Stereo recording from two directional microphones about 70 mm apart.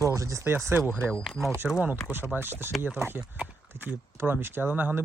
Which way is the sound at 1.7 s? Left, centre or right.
Right.